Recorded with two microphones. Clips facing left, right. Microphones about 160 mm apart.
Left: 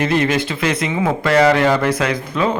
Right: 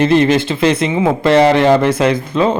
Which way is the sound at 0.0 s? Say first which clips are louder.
Right 6 dB; 30° right (ahead or behind).